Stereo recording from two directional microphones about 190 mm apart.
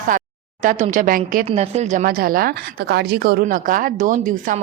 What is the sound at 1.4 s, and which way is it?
A woman's voice, 35° right (ahead or behind).